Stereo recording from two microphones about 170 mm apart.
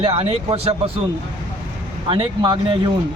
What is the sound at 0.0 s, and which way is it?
Speech, 35° right (ahead or behind).